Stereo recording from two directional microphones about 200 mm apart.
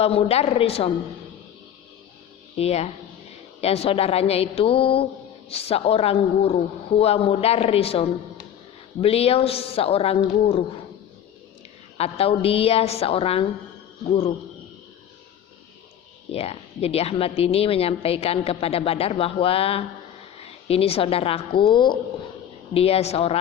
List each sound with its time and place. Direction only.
0.0 s a woman's voice: 30° left (ahead or behind)
2.6 s a woman's voice: 30° left (ahead or behind)
11.9 s a woman's voice: 30° left (ahead or behind)
16.3 s a woman's voice: 30° left (ahead or behind)